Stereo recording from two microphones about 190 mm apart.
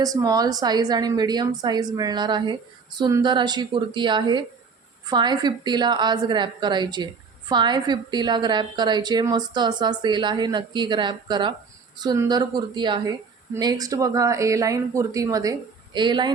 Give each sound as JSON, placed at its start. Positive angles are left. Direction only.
{"t": 0.0, "sound": "a woman's voice", "side_deg": -20}